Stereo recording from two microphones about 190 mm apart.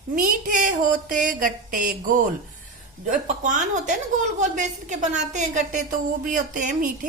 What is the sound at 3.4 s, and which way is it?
A woman's voice, 40° right (ahead or behind).